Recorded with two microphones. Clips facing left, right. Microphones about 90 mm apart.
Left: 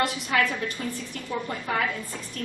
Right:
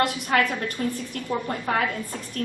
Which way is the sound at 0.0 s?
50° right (ahead or behind).